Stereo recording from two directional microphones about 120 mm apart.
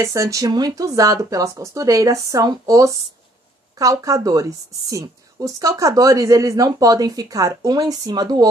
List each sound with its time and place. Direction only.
0.0 s a woman's voice: 25° right (ahead or behind)